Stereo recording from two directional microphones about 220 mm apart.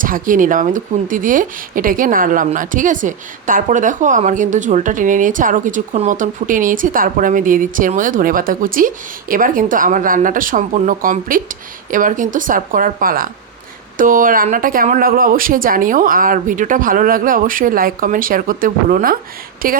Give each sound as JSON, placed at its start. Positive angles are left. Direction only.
{"t": 0.0, "sound": "speech", "side_deg": -40}